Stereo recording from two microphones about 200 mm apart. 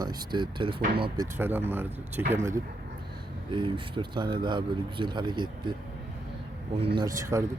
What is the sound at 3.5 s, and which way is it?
Speech, 25° right (ahead or behind).